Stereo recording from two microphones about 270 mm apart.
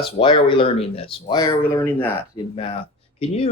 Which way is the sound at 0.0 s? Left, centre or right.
Centre.